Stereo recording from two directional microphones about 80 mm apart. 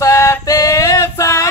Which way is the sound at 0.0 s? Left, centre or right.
Left.